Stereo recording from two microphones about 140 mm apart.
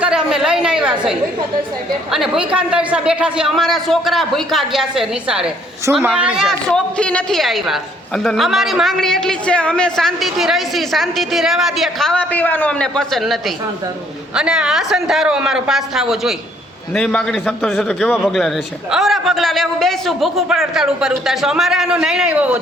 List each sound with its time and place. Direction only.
0.0 s a woman's voice: 5° right (ahead or behind)
5.8 s speech: 20° right (ahead or behind)
6.1 s a woman's voice: 5° right (ahead or behind)